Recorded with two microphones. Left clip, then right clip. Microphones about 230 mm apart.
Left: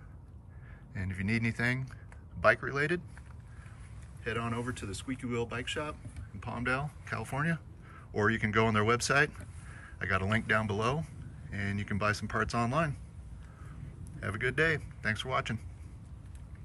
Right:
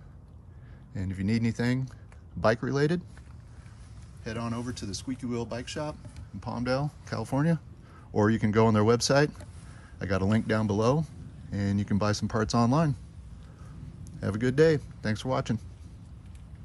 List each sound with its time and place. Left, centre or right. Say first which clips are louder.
0.9 s speech: right 2 dB; centre
4.2 s speech: even; centre
14.0 s a man's voice: right 3 dB; centre